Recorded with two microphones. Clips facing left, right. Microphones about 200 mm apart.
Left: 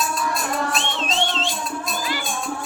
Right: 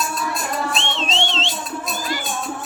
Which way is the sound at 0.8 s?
25° right (ahead or behind).